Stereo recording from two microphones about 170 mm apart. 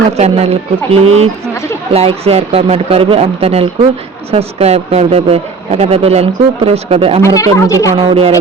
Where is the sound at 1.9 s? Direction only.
35° right (ahead or behind).